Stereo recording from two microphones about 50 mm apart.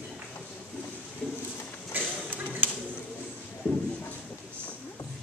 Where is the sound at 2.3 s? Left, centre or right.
Right.